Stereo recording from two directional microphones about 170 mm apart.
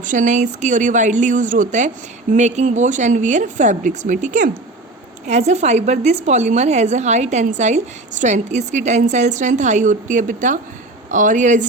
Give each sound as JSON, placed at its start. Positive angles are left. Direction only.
{"t": 0.0, "sound": "a woman's voice", "side_deg": -50}